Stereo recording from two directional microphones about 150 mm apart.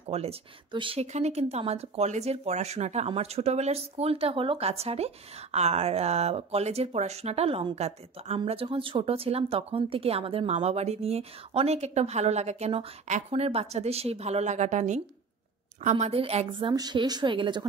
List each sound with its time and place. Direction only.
0.0 s speech: 40° right (ahead or behind)
8.4 s a woman's voice: 35° right (ahead or behind)